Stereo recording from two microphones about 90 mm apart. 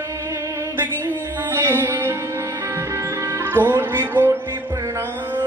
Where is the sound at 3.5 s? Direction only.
25° right (ahead or behind).